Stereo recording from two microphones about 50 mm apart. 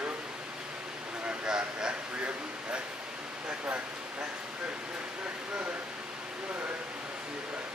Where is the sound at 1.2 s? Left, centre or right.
Right.